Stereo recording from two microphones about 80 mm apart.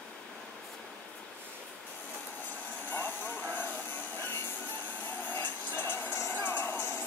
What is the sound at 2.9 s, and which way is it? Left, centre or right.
Vehicle, left.